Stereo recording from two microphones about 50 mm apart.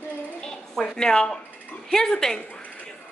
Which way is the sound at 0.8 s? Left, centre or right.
Centre.